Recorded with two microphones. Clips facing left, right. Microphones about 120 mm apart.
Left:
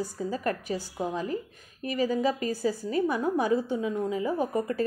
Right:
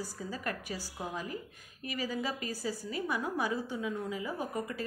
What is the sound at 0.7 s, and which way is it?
Speech, 20° left (ahead or behind).